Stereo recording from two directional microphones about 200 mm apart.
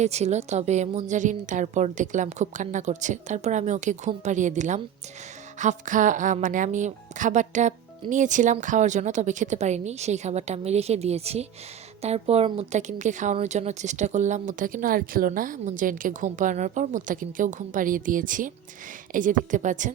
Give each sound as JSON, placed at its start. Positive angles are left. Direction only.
{"t": 0.0, "sound": "speech", "side_deg": -35}